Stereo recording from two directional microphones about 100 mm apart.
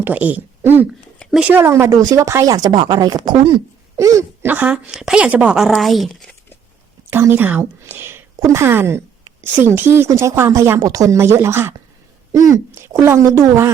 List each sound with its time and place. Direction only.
0.0 s speech: 15° right (ahead or behind); by 2.7 s 35° right (ahead or behind)
2.7 s speech: 50° right (ahead or behind)
3.9 s speech: 30° right (ahead or behind)
4.4 s a woman's voice: 15° right (ahead or behind)
4.9 s speech: 5° right (ahead or behind)
7.1 s a woman's voice: 25° right (ahead or behind)